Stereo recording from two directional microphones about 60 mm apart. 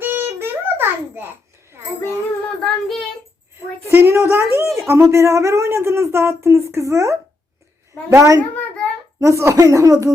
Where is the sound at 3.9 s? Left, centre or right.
Right.